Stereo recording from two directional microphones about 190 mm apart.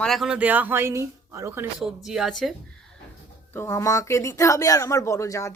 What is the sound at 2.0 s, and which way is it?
Speech, centre (ahead or behind).